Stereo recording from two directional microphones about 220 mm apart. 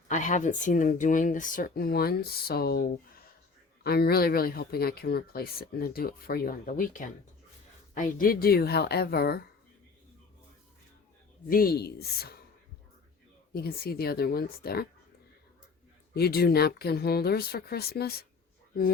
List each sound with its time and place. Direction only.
0.1 s speech: 35° left (ahead or behind)
11.4 s speech: 40° left (ahead or behind)
13.5 s speech: 45° left (ahead or behind)
16.1 s speech: 45° left (ahead or behind)